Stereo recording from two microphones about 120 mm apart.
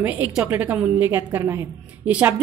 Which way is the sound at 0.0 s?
15° right (ahead or behind).